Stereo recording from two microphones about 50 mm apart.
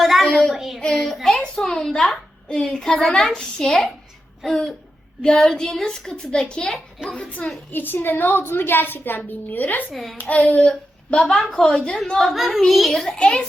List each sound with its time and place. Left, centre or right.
0.0 s child singing: centre
0.3 s child singing: centre
0.5 s a child's voice: centre
0.8 s a child's voice: centre
3.7 s a child's voice: centre; by 7.5 s left
7.7 s a child's voice: left
9.9 s a child's voice: centre
10.2 s a child's voice: left
12.2 s a child's voice: centre
13.1 s a child's voice: centre